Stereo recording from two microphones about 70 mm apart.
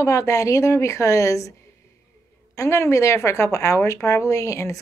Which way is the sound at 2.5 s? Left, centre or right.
Left.